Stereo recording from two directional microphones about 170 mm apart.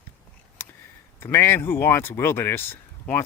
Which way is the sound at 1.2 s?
15° left (ahead or behind).